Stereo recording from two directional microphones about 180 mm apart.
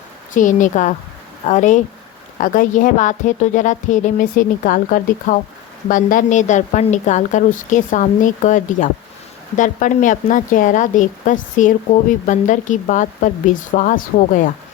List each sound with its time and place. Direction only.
0.3 s a woman's voice: 45° left (ahead or behind)